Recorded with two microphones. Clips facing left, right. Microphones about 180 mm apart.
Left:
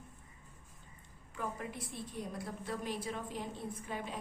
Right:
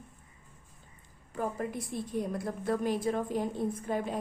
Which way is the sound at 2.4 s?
50° right (ahead or behind).